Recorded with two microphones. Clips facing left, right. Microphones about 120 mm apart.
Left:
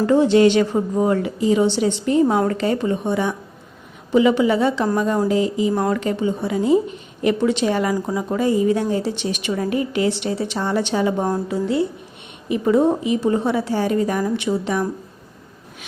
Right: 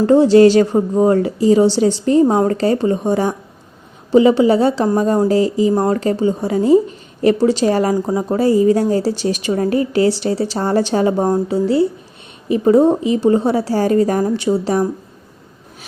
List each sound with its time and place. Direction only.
0.0 s a woman's voice: 35° right (ahead or behind)